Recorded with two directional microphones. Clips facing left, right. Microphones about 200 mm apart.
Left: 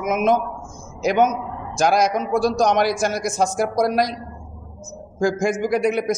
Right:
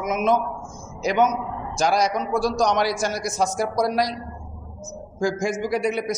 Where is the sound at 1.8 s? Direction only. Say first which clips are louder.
Left 3 dB; 50° left (ahead or behind).